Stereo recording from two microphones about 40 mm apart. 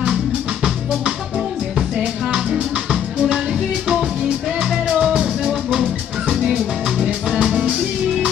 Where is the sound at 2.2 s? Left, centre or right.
Centre.